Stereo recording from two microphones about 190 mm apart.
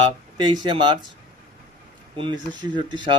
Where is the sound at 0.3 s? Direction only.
25° right (ahead or behind).